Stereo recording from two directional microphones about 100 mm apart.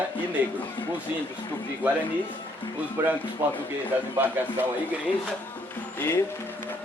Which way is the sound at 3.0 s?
25° right (ahead or behind).